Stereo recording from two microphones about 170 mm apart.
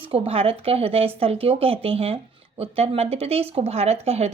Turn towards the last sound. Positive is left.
turn(degrees=-35)  # may be behind; listen again after turning